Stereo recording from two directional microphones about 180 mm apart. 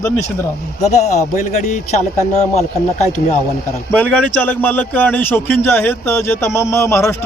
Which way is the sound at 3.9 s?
5° left (ahead or behind).